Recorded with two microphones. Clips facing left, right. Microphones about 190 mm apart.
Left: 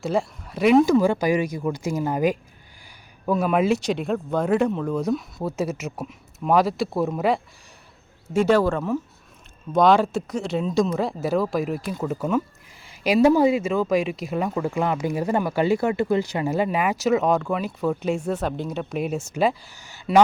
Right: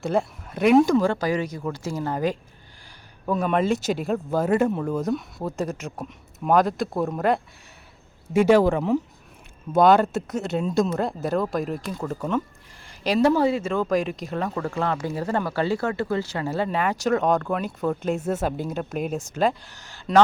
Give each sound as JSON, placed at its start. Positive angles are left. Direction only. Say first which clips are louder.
{"t": 0.0, "sound": "speech", "louder": "even", "side_deg": 0}
{"t": 8.3, "sound": "speech", "louder": "right 2 dB", "side_deg": -10}
{"t": 9.7, "sound": "speech", "louder": "even", "side_deg": 0}